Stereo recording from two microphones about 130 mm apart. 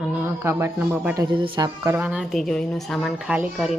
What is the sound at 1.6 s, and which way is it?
Speech, 20° right (ahead or behind).